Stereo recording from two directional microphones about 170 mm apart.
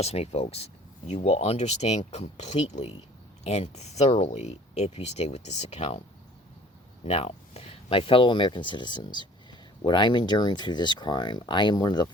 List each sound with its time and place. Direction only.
0.0 s speech: 40° left (ahead or behind)
7.0 s speech: 35° left (ahead or behind)